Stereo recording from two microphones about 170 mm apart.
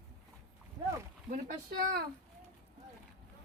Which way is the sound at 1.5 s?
55° right (ahead or behind).